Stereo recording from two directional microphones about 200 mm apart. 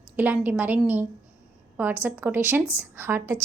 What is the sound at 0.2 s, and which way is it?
A woman's voice, 10° right (ahead or behind).